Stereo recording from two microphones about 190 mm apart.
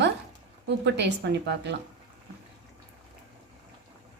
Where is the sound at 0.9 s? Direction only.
65° right (ahead or behind).